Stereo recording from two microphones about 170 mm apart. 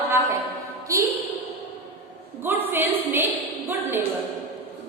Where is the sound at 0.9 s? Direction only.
15° right (ahead or behind).